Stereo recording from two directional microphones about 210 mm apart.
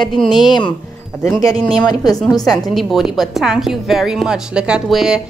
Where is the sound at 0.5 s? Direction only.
20° left (ahead or behind).